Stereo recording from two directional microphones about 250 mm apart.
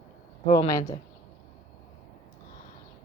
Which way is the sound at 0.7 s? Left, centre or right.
Centre.